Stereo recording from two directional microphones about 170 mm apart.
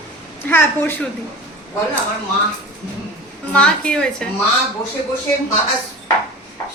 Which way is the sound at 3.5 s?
5° left (ahead or behind).